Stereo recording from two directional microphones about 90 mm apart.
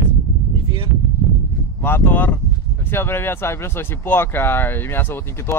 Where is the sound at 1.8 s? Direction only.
25° left (ahead or behind).